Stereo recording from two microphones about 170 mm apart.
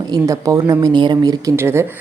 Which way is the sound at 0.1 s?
20° right (ahead or behind).